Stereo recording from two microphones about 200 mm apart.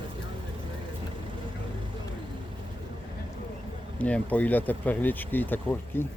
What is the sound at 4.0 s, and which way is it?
Speech, 5° left (ahead or behind).